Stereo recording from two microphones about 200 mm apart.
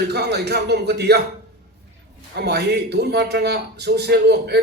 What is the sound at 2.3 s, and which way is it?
A man's voice, 55° right (ahead or behind).